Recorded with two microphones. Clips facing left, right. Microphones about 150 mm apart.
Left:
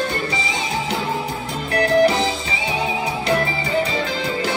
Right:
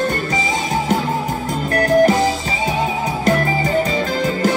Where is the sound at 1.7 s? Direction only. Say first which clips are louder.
Right 2 dB; 45° right (ahead or behind).